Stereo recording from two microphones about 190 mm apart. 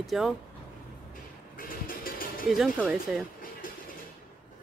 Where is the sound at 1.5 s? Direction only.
50° left (ahead or behind).